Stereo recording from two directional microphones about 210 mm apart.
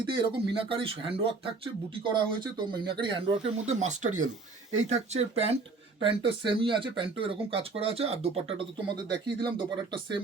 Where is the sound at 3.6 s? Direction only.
35° right (ahead or behind).